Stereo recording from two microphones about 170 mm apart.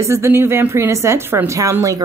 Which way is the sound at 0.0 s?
15° right (ahead or behind).